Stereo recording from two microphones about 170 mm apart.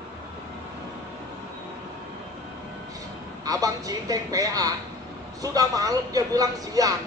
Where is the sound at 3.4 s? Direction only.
20° right (ahead or behind).